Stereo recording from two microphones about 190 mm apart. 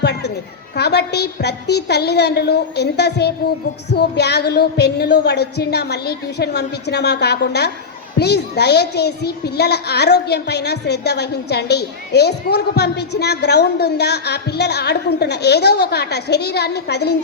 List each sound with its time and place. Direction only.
0.0 s a child's voice: 60° left (ahead or behind)